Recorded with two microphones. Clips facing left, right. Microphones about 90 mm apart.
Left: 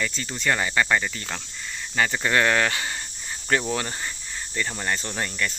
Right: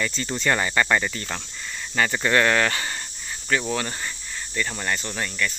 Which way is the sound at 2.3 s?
10° left (ahead or behind).